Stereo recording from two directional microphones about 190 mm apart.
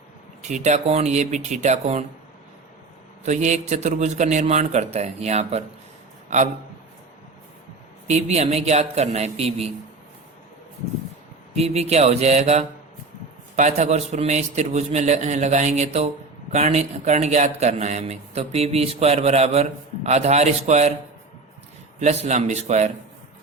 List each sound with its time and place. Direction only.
0.4 s a man's voice: 40° right (ahead or behind)
3.2 s a man's voice: 40° right (ahead or behind)
8.0 s a man's voice: 35° right (ahead or behind)
11.5 s a man's voice: 35° right (ahead or behind)
22.0 s a man's voice: 35° right (ahead or behind)